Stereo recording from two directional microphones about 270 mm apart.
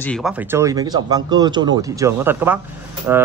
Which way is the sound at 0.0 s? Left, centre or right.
Centre.